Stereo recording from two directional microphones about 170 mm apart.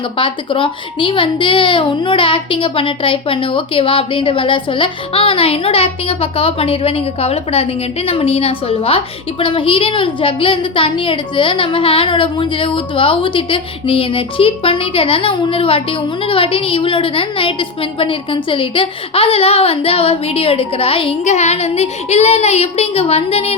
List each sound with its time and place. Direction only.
0.2 s a woman's voice: 30° left (ahead or behind)